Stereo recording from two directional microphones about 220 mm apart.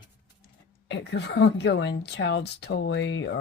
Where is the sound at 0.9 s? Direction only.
50° left (ahead or behind).